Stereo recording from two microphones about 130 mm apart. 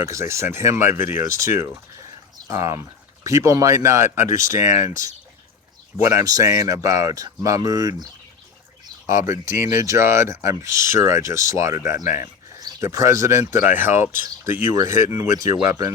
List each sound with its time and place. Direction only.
0.0 s speech: 20° right (ahead or behind)